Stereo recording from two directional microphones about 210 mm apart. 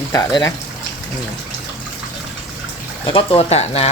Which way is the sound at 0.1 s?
15° left (ahead or behind).